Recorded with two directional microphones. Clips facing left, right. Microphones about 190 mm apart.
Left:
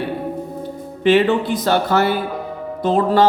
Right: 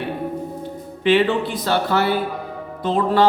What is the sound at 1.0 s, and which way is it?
Speech, 45° left (ahead or behind).